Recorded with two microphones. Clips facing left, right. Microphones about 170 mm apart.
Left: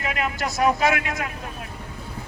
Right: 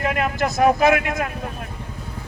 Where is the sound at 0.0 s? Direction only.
50° right (ahead or behind).